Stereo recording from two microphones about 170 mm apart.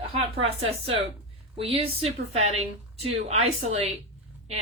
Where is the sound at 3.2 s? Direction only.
40° right (ahead or behind).